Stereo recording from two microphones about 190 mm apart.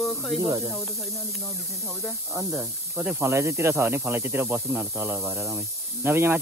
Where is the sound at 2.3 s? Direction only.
10° right (ahead or behind).